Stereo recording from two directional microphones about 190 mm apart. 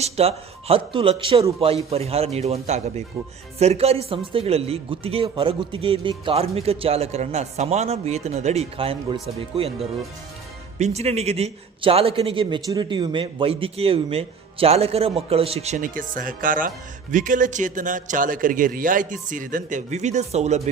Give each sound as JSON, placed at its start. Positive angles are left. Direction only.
{"t": 0.0, "sound": "a man's voice", "side_deg": -30}